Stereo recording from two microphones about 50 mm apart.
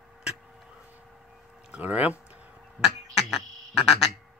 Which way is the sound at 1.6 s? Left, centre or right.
Right.